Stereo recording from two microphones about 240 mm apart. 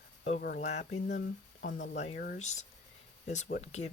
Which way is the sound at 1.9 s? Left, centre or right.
Left.